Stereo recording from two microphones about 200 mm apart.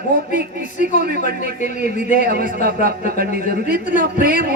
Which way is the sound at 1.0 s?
50° right (ahead or behind).